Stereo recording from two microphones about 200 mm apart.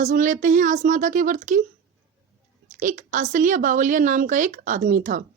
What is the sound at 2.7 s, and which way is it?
A woman's voice, 40° right (ahead or behind).